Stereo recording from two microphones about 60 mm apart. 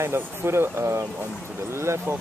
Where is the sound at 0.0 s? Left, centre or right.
Right.